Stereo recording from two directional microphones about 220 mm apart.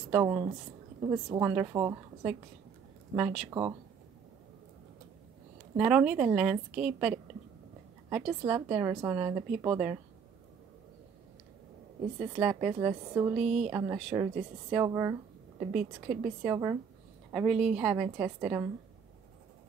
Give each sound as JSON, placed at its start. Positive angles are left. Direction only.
{"t": 0.1, "sound": "a woman's voice", "side_deg": -10}
{"t": 1.4, "sound": "a woman's voice", "side_deg": -5}
{"t": 5.8, "sound": "a woman's voice", "side_deg": -5}
{"t": 12.2, "sound": "a woman's voice", "side_deg": -5}